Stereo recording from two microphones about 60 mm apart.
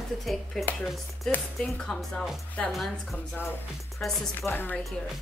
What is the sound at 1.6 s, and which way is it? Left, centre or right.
Speech, centre.